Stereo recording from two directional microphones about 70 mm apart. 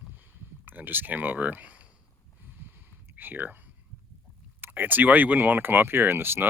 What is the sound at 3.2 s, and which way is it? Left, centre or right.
Speech, right.